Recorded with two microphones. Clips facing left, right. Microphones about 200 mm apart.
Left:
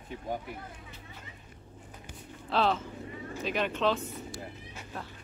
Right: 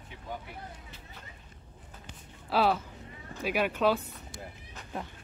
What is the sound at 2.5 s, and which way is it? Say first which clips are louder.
Speech: right 1 dB; 5° right (ahead or behind).